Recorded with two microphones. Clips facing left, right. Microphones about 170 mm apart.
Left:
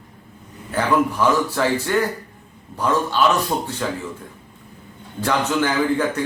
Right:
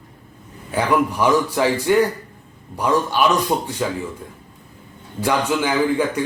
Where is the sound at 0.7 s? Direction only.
15° right (ahead or behind).